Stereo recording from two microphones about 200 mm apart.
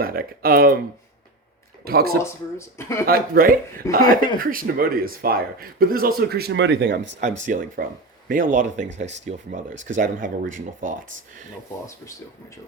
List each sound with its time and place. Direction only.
0.0 s speech: 45° right (ahead or behind)
1.8 s speech: 50° right (ahead or behind)
2.1 s speech: 15° left (ahead or behind)
3.1 s speech: 45° right (ahead or behind); by 7.2 s 65° right (ahead or behind)
7.4 s speech: 40° right (ahead or behind)